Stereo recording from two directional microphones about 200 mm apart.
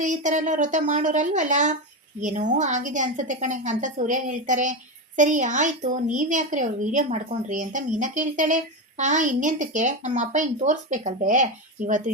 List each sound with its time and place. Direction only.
0.0 s a woman's voice: 40° right (ahead or behind)